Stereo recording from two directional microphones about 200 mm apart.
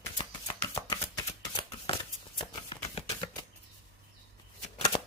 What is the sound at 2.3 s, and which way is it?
Shuffling cards, 25° left (ahead or behind).